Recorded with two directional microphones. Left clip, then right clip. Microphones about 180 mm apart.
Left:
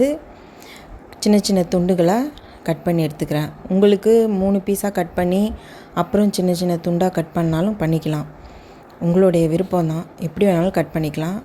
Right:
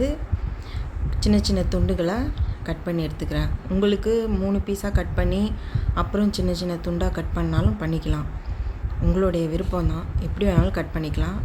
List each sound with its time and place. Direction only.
1.2 s a woman's voice: 35° left (ahead or behind)